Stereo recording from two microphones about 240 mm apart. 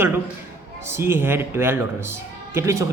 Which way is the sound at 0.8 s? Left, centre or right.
Centre.